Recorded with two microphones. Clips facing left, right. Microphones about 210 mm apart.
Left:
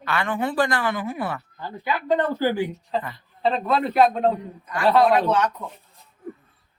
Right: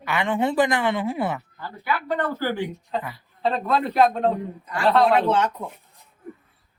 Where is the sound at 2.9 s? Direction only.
10° right (ahead or behind).